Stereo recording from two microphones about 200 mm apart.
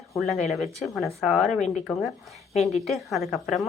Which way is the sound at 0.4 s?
Centre (ahead or behind).